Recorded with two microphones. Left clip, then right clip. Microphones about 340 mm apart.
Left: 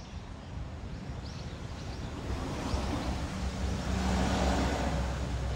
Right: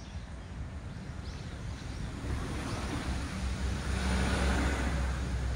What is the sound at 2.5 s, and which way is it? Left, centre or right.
Vehicle, left.